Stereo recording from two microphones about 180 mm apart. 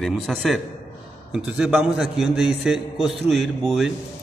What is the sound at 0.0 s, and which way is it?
A man's voice, centre (ahead or behind).